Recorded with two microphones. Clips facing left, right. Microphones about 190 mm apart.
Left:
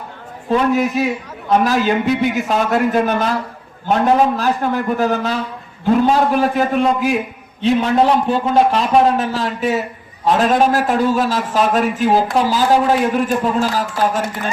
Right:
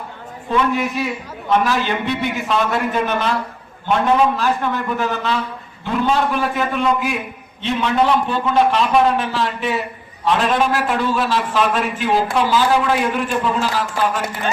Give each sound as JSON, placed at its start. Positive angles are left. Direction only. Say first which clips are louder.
{"t": 0.5, "sound": "a man's voice", "louder": "left 4 dB", "side_deg": 40}